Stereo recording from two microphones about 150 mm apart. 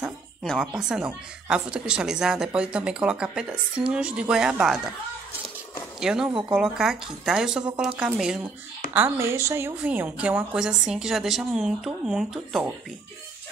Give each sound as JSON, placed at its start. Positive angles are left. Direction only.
{"t": 0.0, "sound": "speech", "side_deg": 0}
{"t": 5.9, "sound": "a woman's voice", "side_deg": -5}